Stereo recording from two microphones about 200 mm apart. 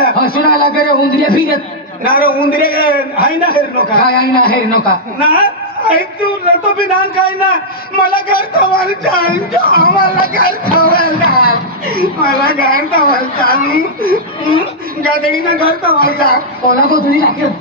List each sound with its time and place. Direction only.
0.0 s a man's voice: 50° left (ahead or behind)
6.8 s speech: 50° left (ahead or behind)
15.6 s speech: 50° left (ahead or behind)